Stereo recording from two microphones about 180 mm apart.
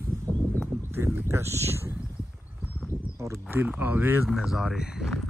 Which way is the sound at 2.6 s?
10° right (ahead or behind).